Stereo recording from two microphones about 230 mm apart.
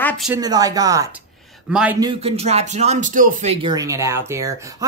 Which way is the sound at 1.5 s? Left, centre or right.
Centre.